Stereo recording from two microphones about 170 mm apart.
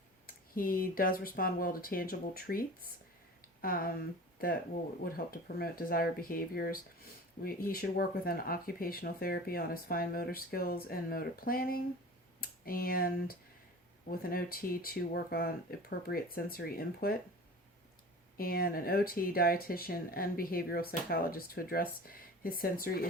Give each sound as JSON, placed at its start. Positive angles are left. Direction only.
{"t": 0.3, "sound": "speech", "side_deg": 55}
{"t": 5.0, "sound": "speech", "side_deg": 60}
{"t": 18.3, "sound": "speech", "side_deg": 60}